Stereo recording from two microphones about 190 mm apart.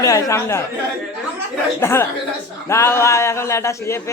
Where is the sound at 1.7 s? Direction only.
10° left (ahead or behind).